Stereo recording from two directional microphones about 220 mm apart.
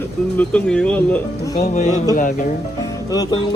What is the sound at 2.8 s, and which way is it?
Music, 15° left (ahead or behind).